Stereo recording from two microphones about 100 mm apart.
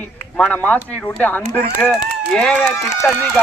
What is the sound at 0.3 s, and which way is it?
Speech, 15° left (ahead or behind).